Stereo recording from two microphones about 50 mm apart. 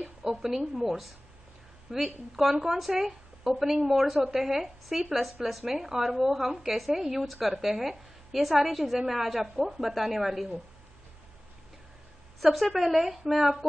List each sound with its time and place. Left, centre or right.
0.2 s a woman's voice: centre
12.4 s speech: centre